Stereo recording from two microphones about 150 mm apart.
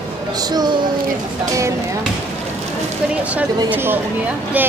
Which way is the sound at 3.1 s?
10° right (ahead or behind).